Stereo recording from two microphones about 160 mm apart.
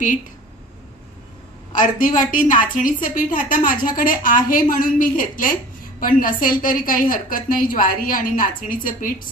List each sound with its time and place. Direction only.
1.7 s a woman's voice: 55° left (ahead or behind)